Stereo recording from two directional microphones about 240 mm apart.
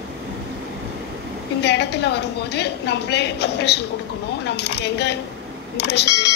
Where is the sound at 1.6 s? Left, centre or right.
Left.